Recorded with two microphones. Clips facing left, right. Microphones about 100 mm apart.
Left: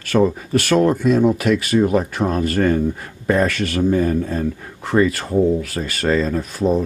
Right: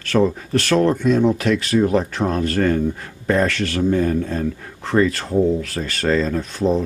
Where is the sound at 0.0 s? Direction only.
5° left (ahead or behind).